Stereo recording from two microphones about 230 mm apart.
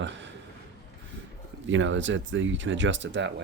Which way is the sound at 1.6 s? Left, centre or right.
Right.